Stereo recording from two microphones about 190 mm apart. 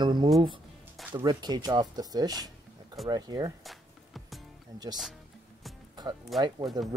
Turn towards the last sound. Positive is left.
turn(degrees=-20)  # may be behind; listen again after turning